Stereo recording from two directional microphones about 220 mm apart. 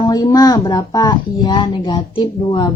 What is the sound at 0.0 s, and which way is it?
A woman's voice, 15° left (ahead or behind).